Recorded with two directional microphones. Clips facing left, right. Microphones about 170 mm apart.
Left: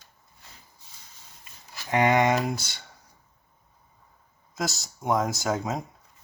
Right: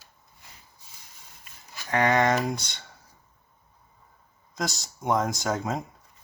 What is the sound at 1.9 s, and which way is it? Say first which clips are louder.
Speech: left 1 dB; 20° left (ahead or behind).